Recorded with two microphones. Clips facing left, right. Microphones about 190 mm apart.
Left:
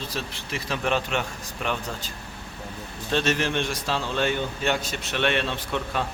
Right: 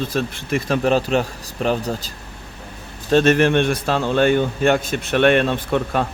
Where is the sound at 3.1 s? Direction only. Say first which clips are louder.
Right 10 dB; 50° right (ahead or behind).